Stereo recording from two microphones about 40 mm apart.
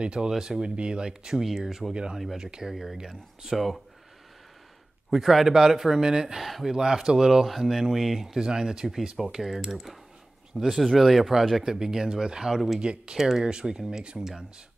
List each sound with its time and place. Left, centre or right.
0.0 s speech: right
1.6 s speech: centre
5.1 s speech: centre
12.8 s speech: right
13.2 s speech: centre
13.5 s speech: centre